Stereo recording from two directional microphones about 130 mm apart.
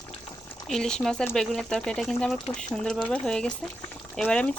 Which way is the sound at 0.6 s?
5° left (ahead or behind).